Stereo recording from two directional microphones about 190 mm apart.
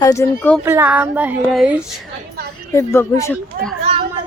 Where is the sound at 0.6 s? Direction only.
10° right (ahead or behind).